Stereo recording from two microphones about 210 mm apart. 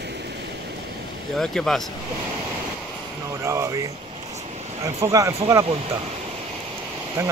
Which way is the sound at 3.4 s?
15° right (ahead or behind).